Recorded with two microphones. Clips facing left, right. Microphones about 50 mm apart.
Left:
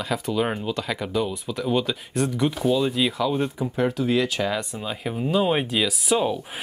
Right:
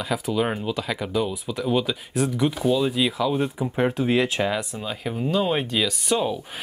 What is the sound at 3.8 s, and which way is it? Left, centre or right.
Speech, right.